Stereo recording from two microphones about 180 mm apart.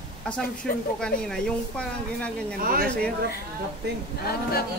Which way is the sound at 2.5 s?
50° right (ahead or behind).